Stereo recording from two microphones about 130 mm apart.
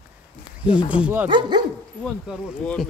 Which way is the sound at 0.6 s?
10° right (ahead or behind).